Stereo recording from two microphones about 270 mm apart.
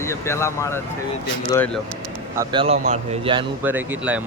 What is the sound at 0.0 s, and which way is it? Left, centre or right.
Speech, centre.